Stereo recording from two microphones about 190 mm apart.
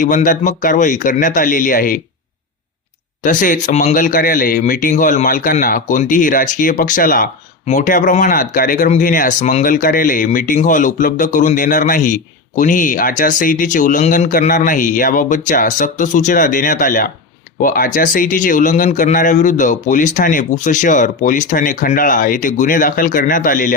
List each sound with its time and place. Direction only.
0.0 s speech: 45° left (ahead or behind)
3.2 s speech: 45° left (ahead or behind)